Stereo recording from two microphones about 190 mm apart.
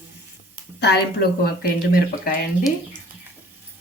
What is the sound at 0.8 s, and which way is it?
Speech, 60° left (ahead or behind).